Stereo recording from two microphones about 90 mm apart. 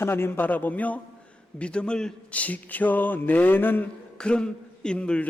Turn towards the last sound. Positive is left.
turn(degrees=10)  # may be behind; listen again after turning